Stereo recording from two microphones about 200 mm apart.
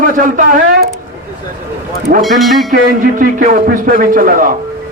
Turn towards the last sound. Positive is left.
turn(degrees=-45)  # may be behind; listen again after turning